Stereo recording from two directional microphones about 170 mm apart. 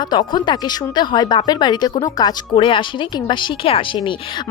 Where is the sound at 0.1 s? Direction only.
25° left (ahead or behind).